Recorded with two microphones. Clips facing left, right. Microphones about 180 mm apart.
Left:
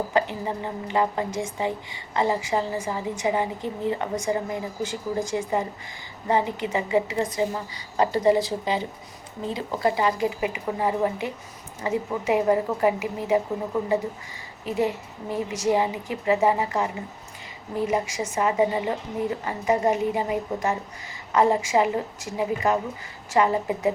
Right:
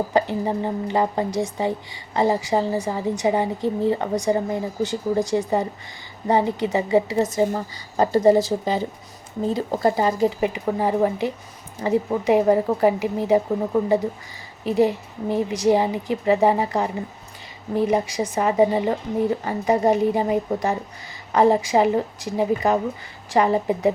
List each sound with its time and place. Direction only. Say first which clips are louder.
0.1 s a woman's voice: right 4 dB; 35° right (ahead or behind)
14.6 s a woman's voice: right 6 dB; 30° right (ahead or behind)